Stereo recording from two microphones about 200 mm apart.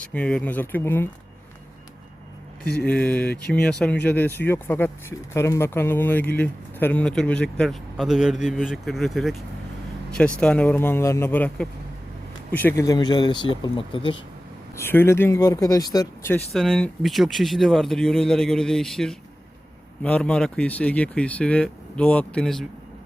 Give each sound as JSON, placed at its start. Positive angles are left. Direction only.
{"t": 0.0, "sound": "speech", "side_deg": 5}
{"t": 2.8, "sound": "speech", "side_deg": 5}
{"t": 14.8, "sound": "speech", "side_deg": 10}
{"t": 16.5, "sound": "speech", "side_deg": 0}